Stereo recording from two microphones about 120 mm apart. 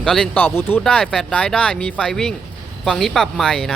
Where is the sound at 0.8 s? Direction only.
5° left (ahead or behind).